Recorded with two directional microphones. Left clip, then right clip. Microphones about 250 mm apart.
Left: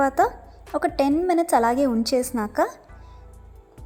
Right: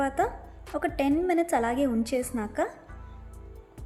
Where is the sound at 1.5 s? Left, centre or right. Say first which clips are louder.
Left 7 dB; centre.